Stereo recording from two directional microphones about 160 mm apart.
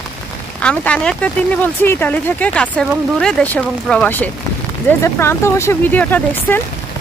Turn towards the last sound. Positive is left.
turn(degrees=10)  # may be behind; listen again after turning